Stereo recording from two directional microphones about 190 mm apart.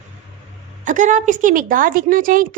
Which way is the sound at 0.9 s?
40° right (ahead or behind).